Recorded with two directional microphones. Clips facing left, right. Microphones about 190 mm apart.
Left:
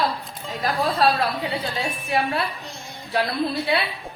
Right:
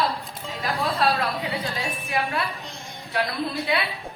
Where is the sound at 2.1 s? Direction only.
30° left (ahead or behind).